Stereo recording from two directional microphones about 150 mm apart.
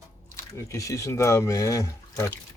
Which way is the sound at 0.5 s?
20° left (ahead or behind).